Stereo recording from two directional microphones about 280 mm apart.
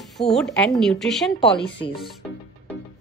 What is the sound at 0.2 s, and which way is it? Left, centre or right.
Speech, centre.